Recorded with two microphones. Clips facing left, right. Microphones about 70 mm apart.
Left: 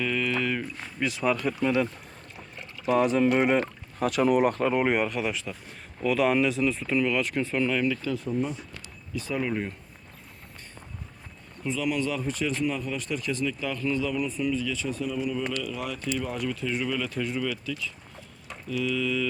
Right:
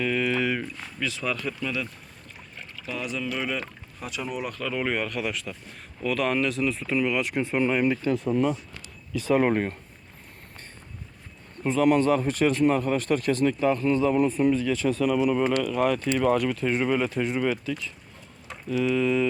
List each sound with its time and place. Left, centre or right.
0.0 s a sound: centre
0.8 s speech: left
1.6 s speech: left
2.8 s speech: left
4.4 s speech: left
4.7 s speech: centre; by 7.9 s right
7.9 s speech: right
9.1 s speech: right
11.6 s speech: right
15.5 s speech: right
16.1 s speech: right
18.4 s a sound: right